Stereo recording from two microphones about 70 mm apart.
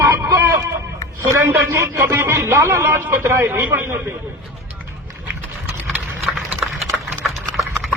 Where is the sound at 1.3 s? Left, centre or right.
Right.